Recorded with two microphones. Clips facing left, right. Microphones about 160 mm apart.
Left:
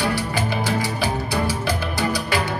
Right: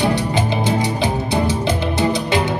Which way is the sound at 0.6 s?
20° right (ahead or behind).